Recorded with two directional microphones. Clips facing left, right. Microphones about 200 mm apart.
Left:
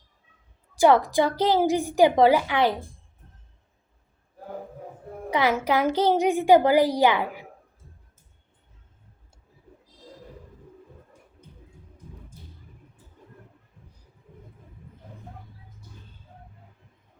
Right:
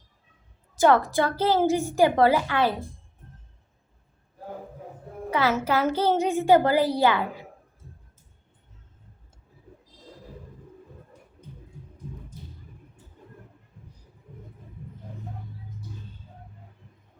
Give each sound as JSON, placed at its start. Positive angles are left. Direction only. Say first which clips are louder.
{"t": 0.8, "sound": "a woman's voice", "louder": "left 1 dB", "side_deg": 15}
{"t": 5.3, "sound": "a woman's voice", "louder": "left 1 dB", "side_deg": 15}